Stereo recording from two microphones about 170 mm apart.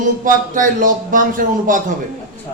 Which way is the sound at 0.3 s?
50° right (ahead or behind).